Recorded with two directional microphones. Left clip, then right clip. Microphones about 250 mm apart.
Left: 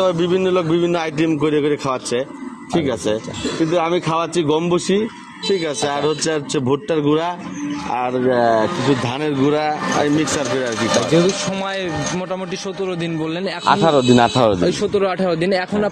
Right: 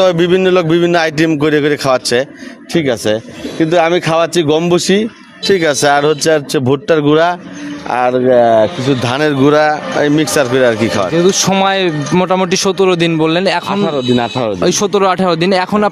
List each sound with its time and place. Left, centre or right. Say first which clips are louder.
0.0 s a man's voice: right 7 dB; right
13.7 s speech: left 1 dB; centre
14.6 s a man's voice: right 6 dB; right